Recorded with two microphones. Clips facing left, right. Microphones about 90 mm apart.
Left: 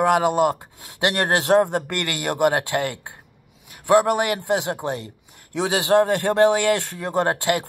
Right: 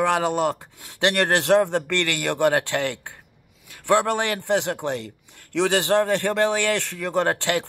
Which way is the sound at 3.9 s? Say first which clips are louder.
Left 5 dB; 10° left (ahead or behind).